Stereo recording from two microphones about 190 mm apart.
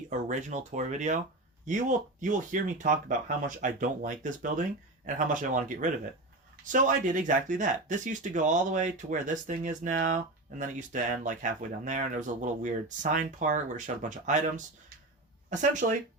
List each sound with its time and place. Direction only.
0.1 s speech: 40° right (ahead or behind)